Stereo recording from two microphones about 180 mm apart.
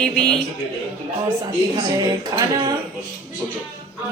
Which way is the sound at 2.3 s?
20° right (ahead or behind).